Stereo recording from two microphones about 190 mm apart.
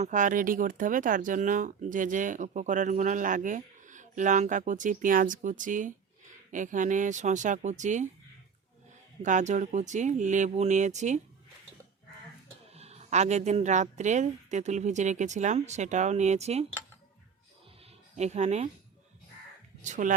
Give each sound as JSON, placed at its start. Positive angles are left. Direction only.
{"t": 0.0, "sound": "a woman's voice", "side_deg": -40}
{"t": 9.2, "sound": "a woman's voice", "side_deg": -40}
{"t": 12.7, "sound": "a woman's voice", "side_deg": -35}
{"t": 18.2, "sound": "a woman's voice", "side_deg": -35}
{"t": 19.8, "sound": "a woman's voice", "side_deg": -40}